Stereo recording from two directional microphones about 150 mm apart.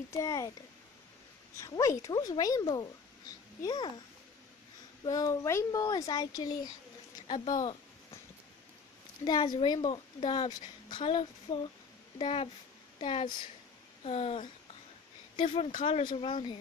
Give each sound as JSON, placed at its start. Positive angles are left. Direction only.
{"t": 0.2, "sound": "speech", "side_deg": 20}
{"t": 1.6, "sound": "speech", "side_deg": 20}
{"t": 5.0, "sound": "speech", "side_deg": 25}
{"t": 9.2, "sound": "a woman's voice", "side_deg": 30}